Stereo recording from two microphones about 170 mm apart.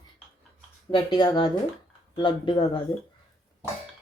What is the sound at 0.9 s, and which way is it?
Speech, 25° left (ahead or behind).